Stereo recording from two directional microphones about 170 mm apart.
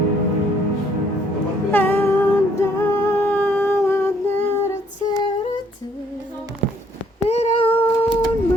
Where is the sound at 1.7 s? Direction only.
10° left (ahead or behind).